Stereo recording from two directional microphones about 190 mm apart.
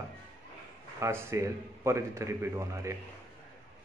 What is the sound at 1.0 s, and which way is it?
A man's voice, 15° right (ahead or behind).